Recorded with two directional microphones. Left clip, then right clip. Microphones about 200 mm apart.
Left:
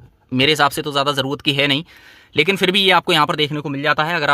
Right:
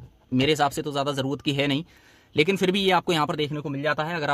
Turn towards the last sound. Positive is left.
turn(degrees=5)  # may be behind; listen again after turning